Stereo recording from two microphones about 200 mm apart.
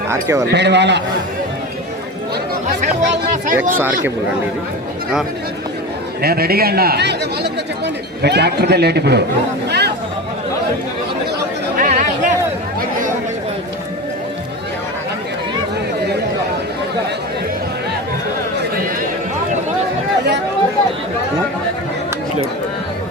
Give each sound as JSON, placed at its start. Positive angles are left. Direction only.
{"t": 0.1, "sound": "speech", "side_deg": -15}
{"t": 0.5, "sound": "a man's voice", "side_deg": -60}
{"t": 2.8, "sound": "speech", "side_deg": -40}
{"t": 3.8, "sound": "speech", "side_deg": -10}
{"t": 6.2, "sound": "a man's voice", "side_deg": -50}
{"t": 9.6, "sound": "a sound", "side_deg": -55}
{"t": 11.8, "sound": "chatter", "side_deg": -40}